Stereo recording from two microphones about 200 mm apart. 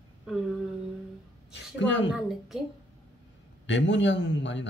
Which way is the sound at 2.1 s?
Centre (ahead or behind).